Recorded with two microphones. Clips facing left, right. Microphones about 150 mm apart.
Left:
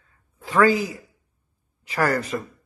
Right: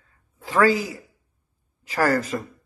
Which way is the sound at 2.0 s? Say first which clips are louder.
Right 1 dB; 30° right (ahead or behind).